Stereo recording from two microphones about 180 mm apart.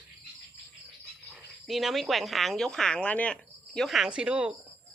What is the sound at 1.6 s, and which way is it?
Speech, centre (ahead or behind).